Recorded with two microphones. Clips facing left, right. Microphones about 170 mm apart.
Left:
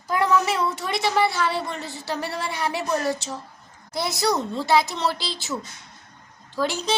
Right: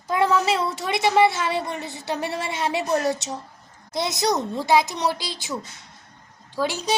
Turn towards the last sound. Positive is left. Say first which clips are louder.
# even
turn(degrees=-15)  # may be behind; listen again after turning